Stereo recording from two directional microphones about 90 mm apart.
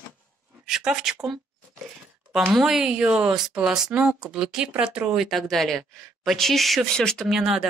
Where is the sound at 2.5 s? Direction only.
5° right (ahead or behind).